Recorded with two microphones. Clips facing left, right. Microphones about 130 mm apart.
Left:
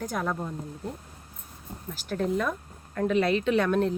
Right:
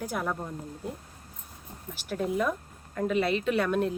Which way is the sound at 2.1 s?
10° right (ahead or behind).